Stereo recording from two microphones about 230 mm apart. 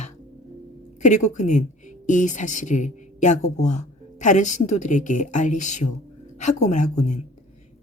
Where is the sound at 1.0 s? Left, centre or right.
Left.